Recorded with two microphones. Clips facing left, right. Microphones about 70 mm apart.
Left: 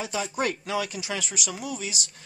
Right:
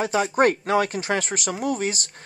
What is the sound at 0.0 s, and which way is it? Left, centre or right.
Speech, right.